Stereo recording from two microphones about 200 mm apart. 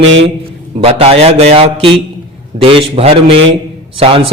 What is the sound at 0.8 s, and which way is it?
A man's voice, 30° right (ahead or behind).